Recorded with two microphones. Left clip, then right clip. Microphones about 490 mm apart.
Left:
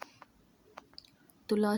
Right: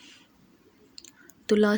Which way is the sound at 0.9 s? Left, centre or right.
Right.